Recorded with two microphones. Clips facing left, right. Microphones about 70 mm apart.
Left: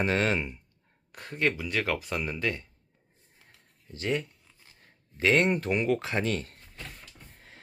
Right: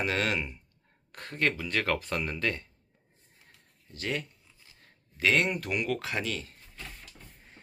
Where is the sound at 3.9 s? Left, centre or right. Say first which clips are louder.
Left 4 dB; left.